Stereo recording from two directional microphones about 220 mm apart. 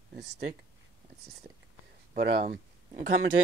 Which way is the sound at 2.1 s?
40° right (ahead or behind).